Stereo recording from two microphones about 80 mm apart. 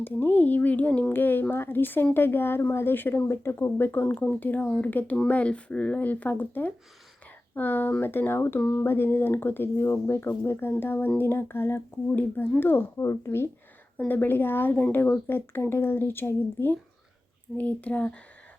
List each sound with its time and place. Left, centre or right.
0.0 s speech: left
17.6 s speech: centre